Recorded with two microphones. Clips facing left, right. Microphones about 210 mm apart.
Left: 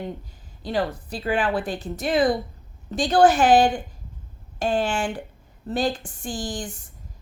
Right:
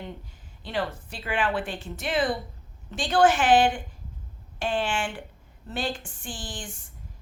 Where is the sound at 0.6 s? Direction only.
35° left (ahead or behind).